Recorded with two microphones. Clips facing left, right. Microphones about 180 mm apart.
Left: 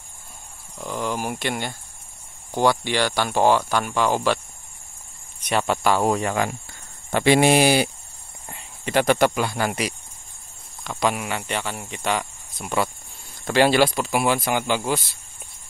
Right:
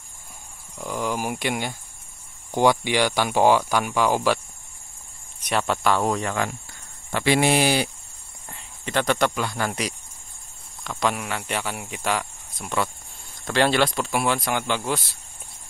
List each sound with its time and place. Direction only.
0.7 s speech: 5° right (ahead or behind)
5.4 s speech: centre (ahead or behind)